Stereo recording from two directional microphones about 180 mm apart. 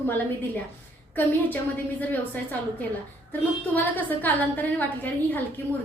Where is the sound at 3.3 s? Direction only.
10° left (ahead or behind).